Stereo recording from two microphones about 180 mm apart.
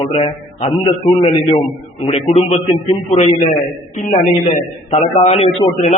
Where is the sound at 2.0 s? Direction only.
35° left (ahead or behind).